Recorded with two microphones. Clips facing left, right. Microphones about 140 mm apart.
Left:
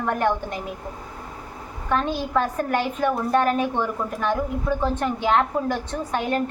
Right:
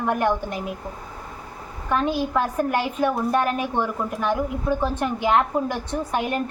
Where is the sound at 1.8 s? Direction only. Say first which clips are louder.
Right 1 dB; 5° right (ahead or behind).